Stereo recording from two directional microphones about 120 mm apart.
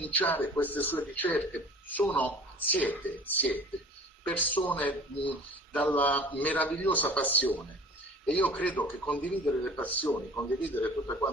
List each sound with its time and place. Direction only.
0.0 s a man's voice: 15° left (ahead or behind)